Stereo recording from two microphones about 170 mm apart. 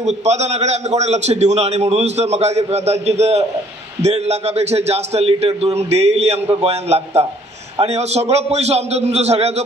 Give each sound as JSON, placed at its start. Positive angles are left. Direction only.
{"t": 0.0, "sound": "a man's voice", "side_deg": -40}